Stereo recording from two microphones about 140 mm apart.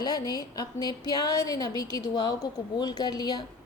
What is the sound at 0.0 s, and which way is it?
A woman's voice, 30° left (ahead or behind).